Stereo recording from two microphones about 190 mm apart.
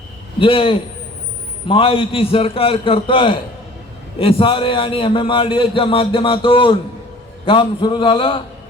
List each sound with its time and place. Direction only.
0.3 s a man's voice: 30° left (ahead or behind)